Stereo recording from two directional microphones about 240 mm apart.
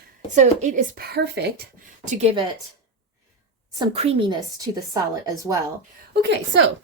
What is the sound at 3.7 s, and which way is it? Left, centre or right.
A woman's voice, right.